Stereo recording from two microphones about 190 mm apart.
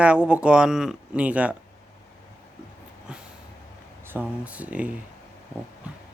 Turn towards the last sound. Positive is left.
turn(degrees=-5)  # may be behind; listen again after turning